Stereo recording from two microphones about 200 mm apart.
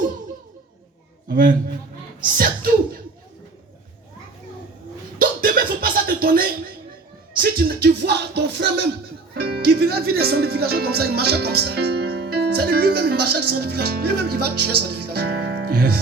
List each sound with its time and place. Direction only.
1.3 s speech: 45° right (ahead or behind)
5.2 s music: 45° right (ahead or behind)
9.3 s speech: 50° right (ahead or behind)